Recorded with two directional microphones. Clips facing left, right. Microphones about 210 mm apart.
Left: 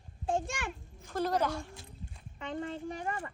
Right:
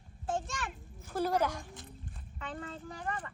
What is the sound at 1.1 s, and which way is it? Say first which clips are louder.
Speech: even; 10° right (ahead or behind).